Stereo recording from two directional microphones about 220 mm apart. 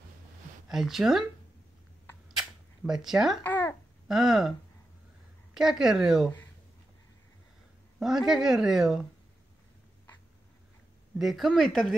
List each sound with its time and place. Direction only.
0.7 s speech: centre (ahead or behind)
2.2 s camera: centre (ahead or behind)
3.4 s babbling: 10° left (ahead or behind)
4.1 s speech: centre (ahead or behind)
8.0 s speech: centre (ahead or behind)
11.1 s speech: centre (ahead or behind)